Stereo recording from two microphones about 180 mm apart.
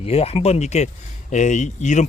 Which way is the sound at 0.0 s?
35° left (ahead or behind).